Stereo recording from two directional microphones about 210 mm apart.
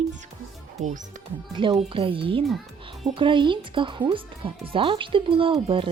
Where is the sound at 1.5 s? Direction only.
25° right (ahead or behind).